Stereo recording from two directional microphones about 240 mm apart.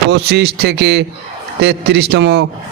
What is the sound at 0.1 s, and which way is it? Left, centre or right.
Speech, right.